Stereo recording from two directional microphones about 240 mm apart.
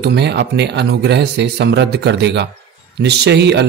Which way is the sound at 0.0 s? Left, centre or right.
Right.